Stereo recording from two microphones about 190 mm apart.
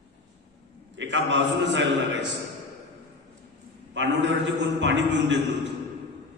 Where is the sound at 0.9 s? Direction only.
75° right (ahead or behind).